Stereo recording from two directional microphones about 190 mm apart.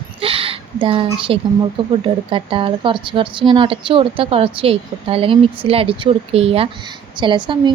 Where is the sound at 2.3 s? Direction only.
25° right (ahead or behind).